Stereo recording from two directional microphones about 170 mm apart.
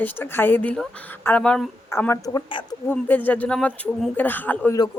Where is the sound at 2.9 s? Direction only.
10° left (ahead or behind).